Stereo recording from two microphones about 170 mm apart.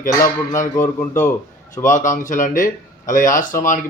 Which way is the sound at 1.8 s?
50° left (ahead or behind).